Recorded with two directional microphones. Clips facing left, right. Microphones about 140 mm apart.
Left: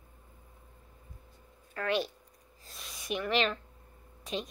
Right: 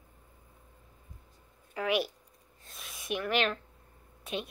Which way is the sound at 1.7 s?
10° right (ahead or behind).